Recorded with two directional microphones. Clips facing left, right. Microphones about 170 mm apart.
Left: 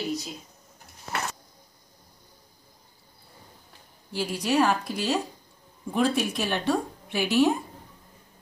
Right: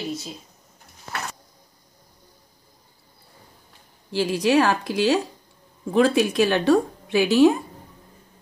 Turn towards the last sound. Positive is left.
turn(degrees=-90)